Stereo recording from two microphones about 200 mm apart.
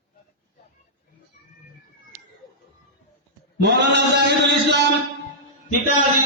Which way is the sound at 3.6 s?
60° right (ahead or behind).